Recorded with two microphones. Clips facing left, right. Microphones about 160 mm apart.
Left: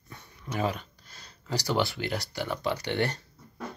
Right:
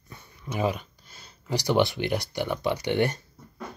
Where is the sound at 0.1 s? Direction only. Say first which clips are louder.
Right 1 dB; 10° right (ahead or behind).